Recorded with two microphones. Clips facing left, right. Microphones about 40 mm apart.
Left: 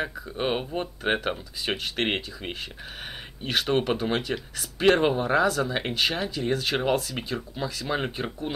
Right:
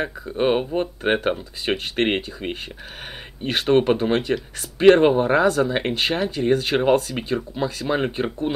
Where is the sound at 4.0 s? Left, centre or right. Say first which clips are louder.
Right 6 dB; right.